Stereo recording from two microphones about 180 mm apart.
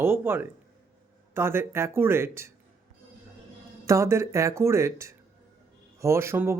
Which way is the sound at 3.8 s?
15° right (ahead or behind).